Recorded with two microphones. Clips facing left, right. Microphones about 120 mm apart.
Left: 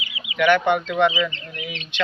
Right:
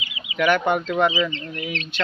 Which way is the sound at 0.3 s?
40° right (ahead or behind).